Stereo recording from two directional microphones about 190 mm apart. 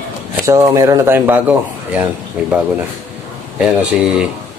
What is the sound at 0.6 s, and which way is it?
Speech, 20° right (ahead or behind).